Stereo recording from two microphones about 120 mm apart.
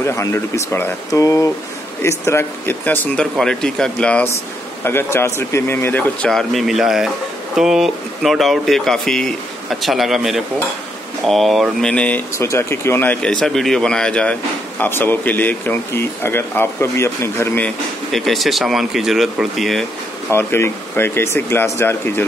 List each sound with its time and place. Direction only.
0.0 s speech: 20° left (ahead or behind)
3.3 s speech: 5° left (ahead or behind)
4.8 s speech: 20° left (ahead or behind)
6.3 s speech: centre (ahead or behind)
11.9 s speech: 10° left (ahead or behind)
12.4 s speech: 20° left (ahead or behind)
14.8 s speech: 15° left (ahead or behind)
17.6 s speech: centre (ahead or behind)
20.3 s speech: 20° left (ahead or behind)